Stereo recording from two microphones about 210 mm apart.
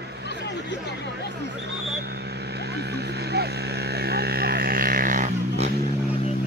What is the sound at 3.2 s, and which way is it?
Vehicle, 50° right (ahead or behind).